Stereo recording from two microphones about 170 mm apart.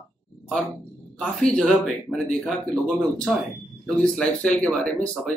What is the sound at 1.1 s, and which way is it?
Speech, 5° left (ahead or behind).